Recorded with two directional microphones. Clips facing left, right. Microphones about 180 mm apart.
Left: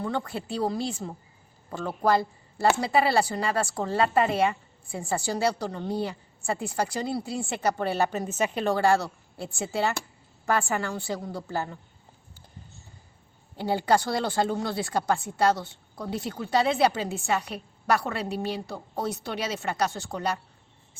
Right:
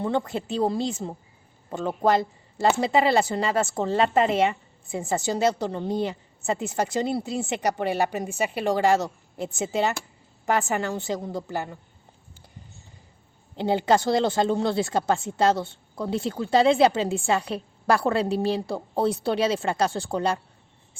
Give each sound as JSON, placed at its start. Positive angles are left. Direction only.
{"t": 0.0, "sound": "a woman's voice", "side_deg": -25}
{"t": 13.6, "sound": "a woman's voice", "side_deg": -20}